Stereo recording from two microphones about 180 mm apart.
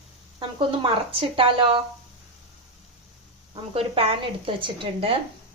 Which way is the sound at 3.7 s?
30° right (ahead or behind).